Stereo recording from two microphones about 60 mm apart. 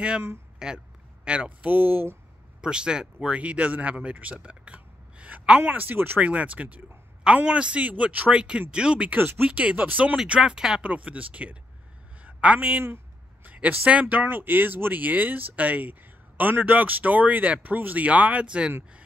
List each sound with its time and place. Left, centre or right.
0.6 s speech: centre
1.2 s speech: right
2.6 s speech: centre; by 6.2 s right
6.2 s speech: right
9.1 s speech: right
9.5 s speech: right
10.1 s speech: centre
10.8 s a woman's voice: right
12.8 s a sound: right
13.5 s speech: right